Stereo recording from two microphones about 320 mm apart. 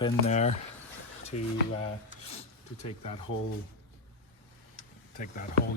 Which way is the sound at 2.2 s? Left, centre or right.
Centre.